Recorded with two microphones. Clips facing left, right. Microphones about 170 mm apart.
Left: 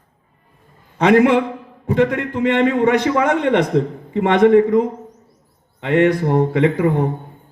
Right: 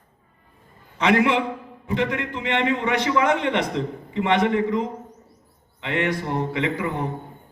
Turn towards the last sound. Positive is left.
turn(degrees=55)  # may be behind; listen again after turning